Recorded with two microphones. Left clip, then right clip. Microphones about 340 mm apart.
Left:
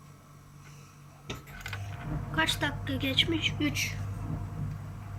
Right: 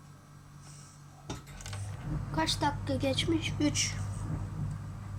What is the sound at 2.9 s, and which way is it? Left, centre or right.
Speech, right.